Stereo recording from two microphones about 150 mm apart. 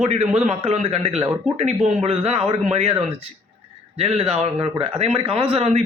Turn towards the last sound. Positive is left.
turn(degrees=-45)  # may be behind; listen again after turning